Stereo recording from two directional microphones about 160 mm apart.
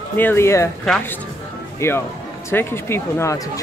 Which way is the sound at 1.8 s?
15° left (ahead or behind).